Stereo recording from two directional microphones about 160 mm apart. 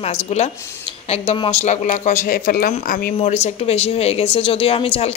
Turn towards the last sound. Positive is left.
turn(degrees=35)  # may be behind; listen again after turning